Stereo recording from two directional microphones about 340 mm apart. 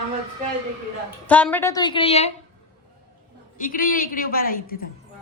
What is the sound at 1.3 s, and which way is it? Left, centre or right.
A woman's voice, centre.